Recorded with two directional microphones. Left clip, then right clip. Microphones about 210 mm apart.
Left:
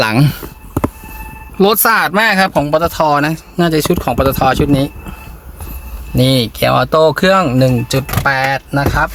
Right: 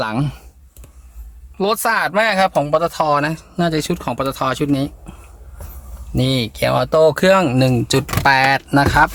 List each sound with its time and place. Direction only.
0.0 s speech: 40° left (ahead or behind)
1.5 s speech: 10° left (ahead or behind)
6.1 s speech: centre (ahead or behind); by 9.1 s 25° right (ahead or behind)